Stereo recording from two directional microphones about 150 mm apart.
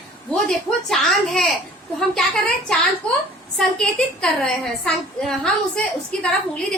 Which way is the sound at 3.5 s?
5° left (ahead or behind).